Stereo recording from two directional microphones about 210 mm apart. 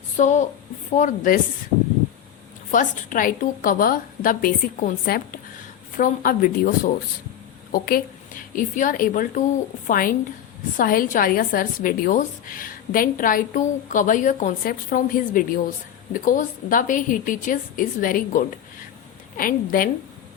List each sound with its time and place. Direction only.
0.2 s a woman's voice: 35° left (ahead or behind)
2.7 s a woman's voice: 40° left (ahead or behind)